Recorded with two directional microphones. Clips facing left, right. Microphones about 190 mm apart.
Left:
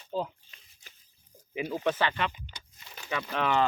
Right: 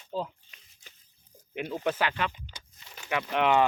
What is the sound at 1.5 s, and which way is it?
Speech, centre (ahead or behind).